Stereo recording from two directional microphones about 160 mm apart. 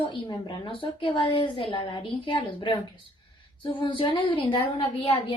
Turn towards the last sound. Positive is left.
turn(degrees=35)  # may be behind; listen again after turning